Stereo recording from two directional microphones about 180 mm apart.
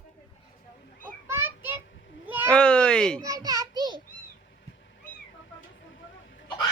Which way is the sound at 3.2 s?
20° right (ahead or behind).